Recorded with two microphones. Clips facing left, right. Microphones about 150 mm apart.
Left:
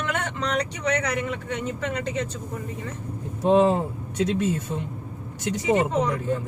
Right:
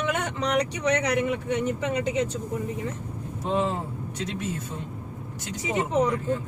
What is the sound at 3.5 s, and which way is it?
Speech, 70° left (ahead or behind).